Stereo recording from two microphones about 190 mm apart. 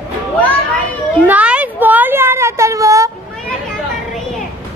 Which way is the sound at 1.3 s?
5° right (ahead or behind).